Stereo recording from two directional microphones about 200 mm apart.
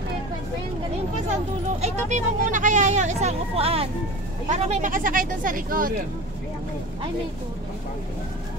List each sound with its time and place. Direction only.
1.8 s speech: 35° right (ahead or behind)